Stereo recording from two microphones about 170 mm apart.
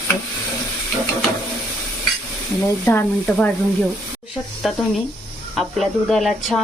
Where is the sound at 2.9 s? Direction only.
10° left (ahead or behind).